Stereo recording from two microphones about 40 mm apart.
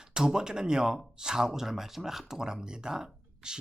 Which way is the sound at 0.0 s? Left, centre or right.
Centre.